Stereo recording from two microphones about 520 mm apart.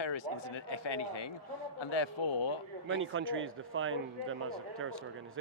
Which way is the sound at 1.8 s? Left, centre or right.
Left.